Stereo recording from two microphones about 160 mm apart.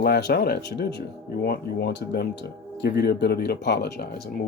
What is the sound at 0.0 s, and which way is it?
Speech, 90° left.